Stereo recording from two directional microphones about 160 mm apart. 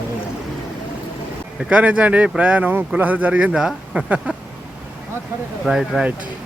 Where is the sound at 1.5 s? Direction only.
5° right (ahead or behind).